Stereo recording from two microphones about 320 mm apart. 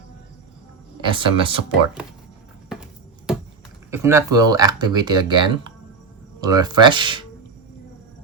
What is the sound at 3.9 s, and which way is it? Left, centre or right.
Speech, centre.